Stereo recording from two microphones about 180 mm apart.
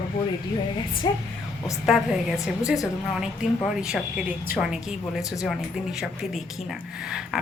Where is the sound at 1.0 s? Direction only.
25° left (ahead or behind).